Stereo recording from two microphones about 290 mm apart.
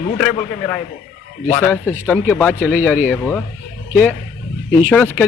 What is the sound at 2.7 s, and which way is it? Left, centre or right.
Speech, centre.